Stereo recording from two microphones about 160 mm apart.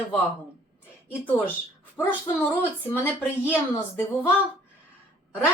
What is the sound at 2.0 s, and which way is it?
Speech, 10° left (ahead or behind).